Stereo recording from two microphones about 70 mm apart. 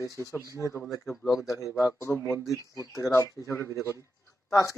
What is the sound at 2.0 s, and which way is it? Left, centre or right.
Speech, left.